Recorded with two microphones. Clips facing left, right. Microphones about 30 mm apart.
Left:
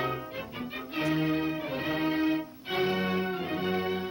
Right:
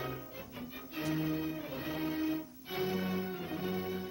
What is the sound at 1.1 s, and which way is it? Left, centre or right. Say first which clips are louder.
Music: left 6 dB; left.